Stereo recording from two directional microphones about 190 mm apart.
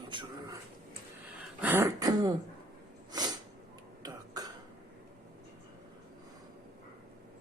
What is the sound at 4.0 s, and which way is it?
Cough, 20° right (ahead or behind).